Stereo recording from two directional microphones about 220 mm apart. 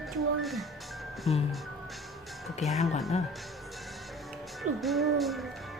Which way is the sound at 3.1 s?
30° left (ahead or behind).